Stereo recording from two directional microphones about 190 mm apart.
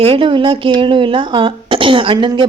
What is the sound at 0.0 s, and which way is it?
Speech, 30° right (ahead or behind).